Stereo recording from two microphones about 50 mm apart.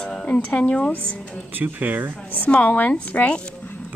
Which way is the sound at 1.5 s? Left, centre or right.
Right.